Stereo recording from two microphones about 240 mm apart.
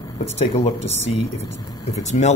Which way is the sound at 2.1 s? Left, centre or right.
Left.